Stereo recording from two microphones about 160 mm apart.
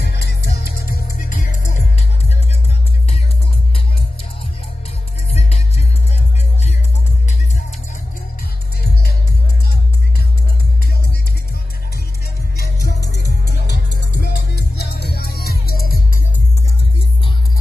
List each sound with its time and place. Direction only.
0.0 s music: 90° left; by 2.3 s 45° left (ahead or behind)
5.3 s music: 40° left (ahead or behind)
12.5 s music: 85° left